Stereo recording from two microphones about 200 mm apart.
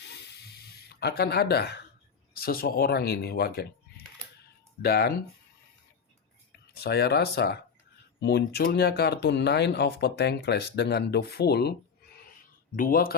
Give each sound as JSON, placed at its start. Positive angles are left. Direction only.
{"t": 0.0, "sound": "a sound", "side_deg": 55}
{"t": 2.3, "sound": "speech", "side_deg": 50}
{"t": 6.7, "sound": "speech", "side_deg": 55}
{"t": 12.7, "sound": "speech", "side_deg": 45}